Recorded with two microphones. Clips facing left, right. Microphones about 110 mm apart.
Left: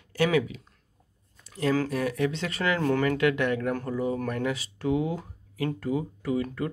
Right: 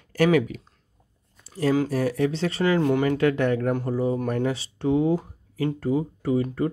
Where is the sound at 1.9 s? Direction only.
35° right (ahead or behind); by 3.2 s 20° right (ahead or behind).